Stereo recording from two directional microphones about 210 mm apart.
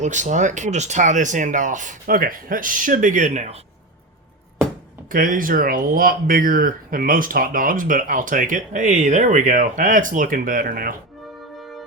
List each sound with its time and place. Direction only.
0.0 s speech: 35° right (ahead or behind)
5.0 s speech: 40° right (ahead or behind)